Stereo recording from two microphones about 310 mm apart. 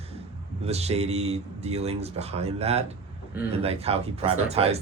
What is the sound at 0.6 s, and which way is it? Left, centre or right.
A man's voice, centre.